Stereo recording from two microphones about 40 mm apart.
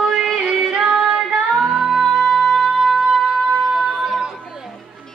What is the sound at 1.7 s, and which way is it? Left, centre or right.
Music, centre.